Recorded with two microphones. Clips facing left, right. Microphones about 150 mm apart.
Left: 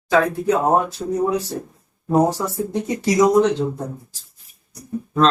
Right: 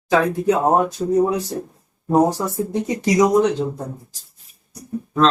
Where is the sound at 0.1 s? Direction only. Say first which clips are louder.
Even; 20° right (ahead or behind).